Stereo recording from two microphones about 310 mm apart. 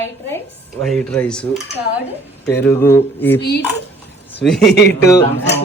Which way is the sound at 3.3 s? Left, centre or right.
Left.